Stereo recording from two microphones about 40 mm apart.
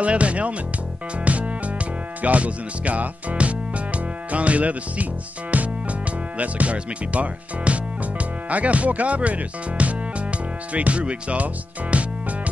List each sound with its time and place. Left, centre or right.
0.0 s speech: right
1.1 s music: right
5.5 s speech: right